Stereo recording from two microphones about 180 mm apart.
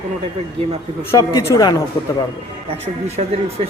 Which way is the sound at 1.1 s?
20° left (ahead or behind).